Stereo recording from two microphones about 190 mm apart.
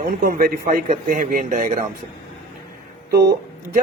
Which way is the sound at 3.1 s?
55° right (ahead or behind).